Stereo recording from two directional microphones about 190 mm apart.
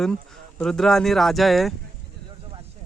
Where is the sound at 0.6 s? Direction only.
5° left (ahead or behind).